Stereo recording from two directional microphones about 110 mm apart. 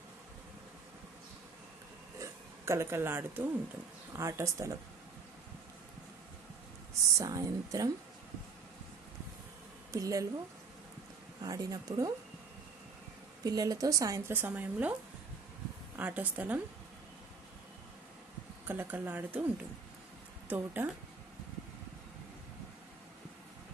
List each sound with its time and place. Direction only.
2.1 s a sound: 25° right (ahead or behind)
4.1 s speech: 30° right (ahead or behind)
7.2 s speech: 30° right (ahead or behind)
9.9 s speech: 30° right (ahead or behind)
11.4 s speech: 35° right (ahead or behind)
13.4 s speech: 35° right (ahead or behind); by 15.0 s 15° right (ahead or behind)
16.0 s speech: 15° right (ahead or behind)
18.7 s speech: 20° right (ahead or behind)